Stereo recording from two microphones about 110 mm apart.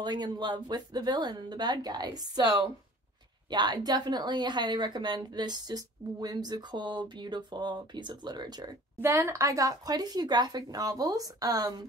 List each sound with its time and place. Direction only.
0.0 s a woman's voice: 40° right (ahead or behind)
3.4 s a woman's voice: 40° right (ahead or behind)
9.0 s a woman's voice: 25° right (ahead or behind)